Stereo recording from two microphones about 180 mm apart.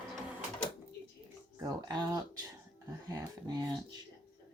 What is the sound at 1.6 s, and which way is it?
Speech, 20° right (ahead or behind).